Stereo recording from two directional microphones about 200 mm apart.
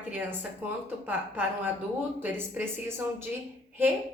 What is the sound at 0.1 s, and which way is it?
A woman's voice, 10° right (ahead or behind).